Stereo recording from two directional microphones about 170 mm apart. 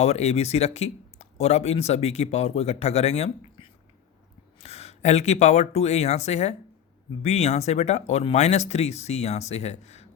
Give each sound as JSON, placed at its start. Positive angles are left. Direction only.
{"t": 0.0, "sound": "speech", "side_deg": 40}